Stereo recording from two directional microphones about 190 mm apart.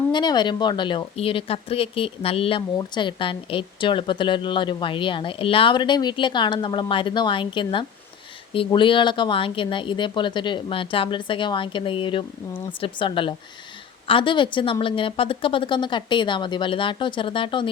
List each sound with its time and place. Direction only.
0.1 s speech: 25° left (ahead or behind)